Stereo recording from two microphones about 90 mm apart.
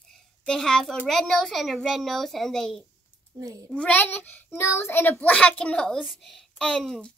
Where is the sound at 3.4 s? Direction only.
40° right (ahead or behind).